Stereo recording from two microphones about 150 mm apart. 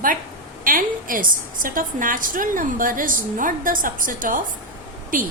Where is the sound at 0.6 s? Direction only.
65° right (ahead or behind).